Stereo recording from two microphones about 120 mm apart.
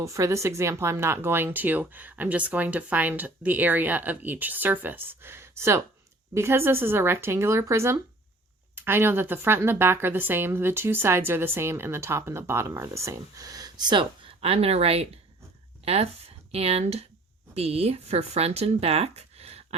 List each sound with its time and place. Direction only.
0.0 s a woman's voice: 25° right (ahead or behind); by 19.6 s 60° right (ahead or behind)